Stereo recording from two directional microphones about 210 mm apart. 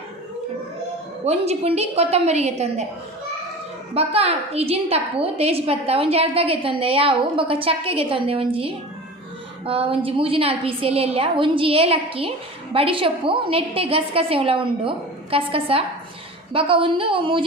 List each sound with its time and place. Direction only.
1.2 s a woman's voice: 30° right (ahead or behind)
3.9 s a woman's voice: 30° right (ahead or behind)